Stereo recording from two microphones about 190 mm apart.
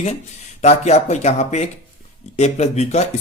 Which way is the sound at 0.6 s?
35° left (ahead or behind).